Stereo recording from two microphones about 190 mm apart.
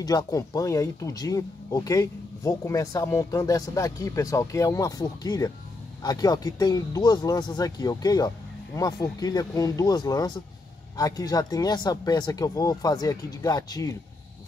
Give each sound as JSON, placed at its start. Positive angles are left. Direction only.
{"t": 0.0, "sound": "speech", "side_deg": 20}